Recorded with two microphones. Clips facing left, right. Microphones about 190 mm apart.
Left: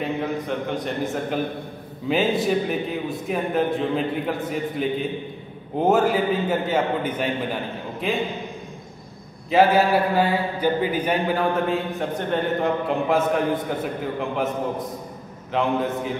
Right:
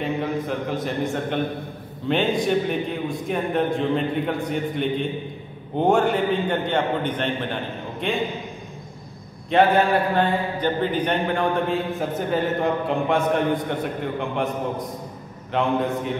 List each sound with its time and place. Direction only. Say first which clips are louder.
0.0 s a man's voice: right 1 dB; centre (ahead or behind)
9.5 s a man's voice: even; 5° left (ahead or behind)